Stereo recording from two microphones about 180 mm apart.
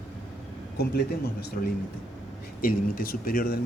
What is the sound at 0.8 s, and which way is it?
Speech, 60° left (ahead or behind).